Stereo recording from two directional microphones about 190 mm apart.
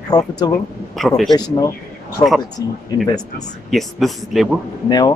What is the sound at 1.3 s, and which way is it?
Speech, 20° left (ahead or behind).